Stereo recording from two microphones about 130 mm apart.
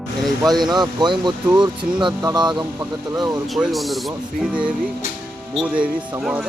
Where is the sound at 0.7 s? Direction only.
35° right (ahead or behind).